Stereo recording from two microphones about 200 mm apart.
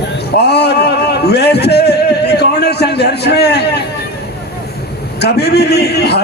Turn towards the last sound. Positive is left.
turn(degrees=55)  # may be behind; listen again after turning